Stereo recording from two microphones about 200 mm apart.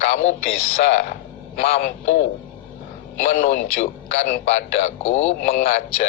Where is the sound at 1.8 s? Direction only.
35° left (ahead or behind).